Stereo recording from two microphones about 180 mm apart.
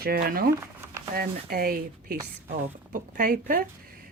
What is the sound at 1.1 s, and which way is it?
Speech, 55° right (ahead or behind).